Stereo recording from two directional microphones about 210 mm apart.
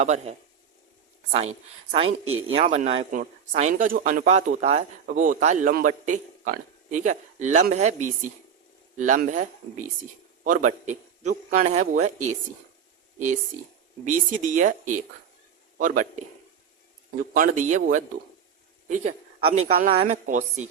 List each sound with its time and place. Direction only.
0.0 s a man's voice: 35° right (ahead or behind)
2.0 s speech: 70° right (ahead or behind)
2.6 s a man's voice: 30° right (ahead or behind)
17.3 s a man's voice: 40° right (ahead or behind)